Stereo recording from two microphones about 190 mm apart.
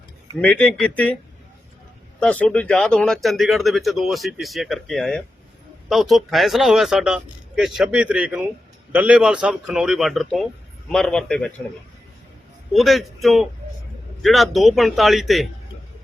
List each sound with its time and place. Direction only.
0.4 s speech: 5° left (ahead or behind)
2.2 s speech: 5° left (ahead or behind)
12.7 s speech: centre (ahead or behind)